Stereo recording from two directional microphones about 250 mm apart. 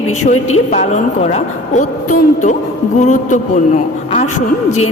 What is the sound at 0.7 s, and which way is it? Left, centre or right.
Speech, left.